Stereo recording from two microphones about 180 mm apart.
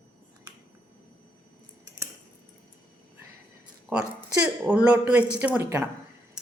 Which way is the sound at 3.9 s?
5° right (ahead or behind).